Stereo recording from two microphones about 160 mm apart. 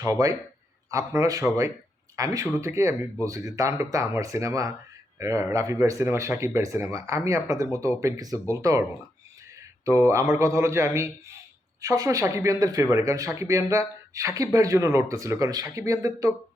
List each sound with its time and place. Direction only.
0.0 s speech: 20° right (ahead or behind)
9.8 s a man's voice: 20° right (ahead or behind)